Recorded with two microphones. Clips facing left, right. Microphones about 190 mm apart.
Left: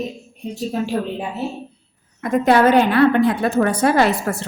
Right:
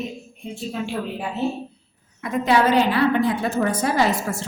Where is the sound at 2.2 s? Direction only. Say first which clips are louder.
Left 4 dB; 50° left (ahead or behind).